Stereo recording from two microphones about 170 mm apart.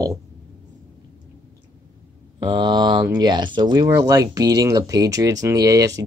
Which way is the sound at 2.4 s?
25° right (ahead or behind).